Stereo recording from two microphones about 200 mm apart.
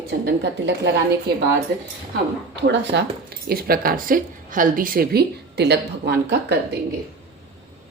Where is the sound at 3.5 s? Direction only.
50° right (ahead or behind).